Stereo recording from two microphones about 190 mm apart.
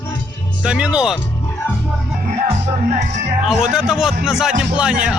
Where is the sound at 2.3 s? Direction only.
30° right (ahead or behind).